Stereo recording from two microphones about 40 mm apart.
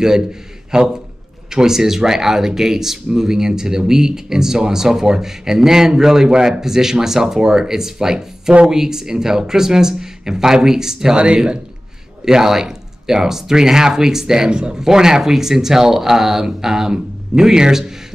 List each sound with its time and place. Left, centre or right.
0.7 s a man's voice: centre
12.3 s speech: centre